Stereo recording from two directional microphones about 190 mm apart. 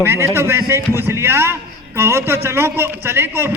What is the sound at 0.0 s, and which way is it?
A man's voice, 15° right (ahead or behind).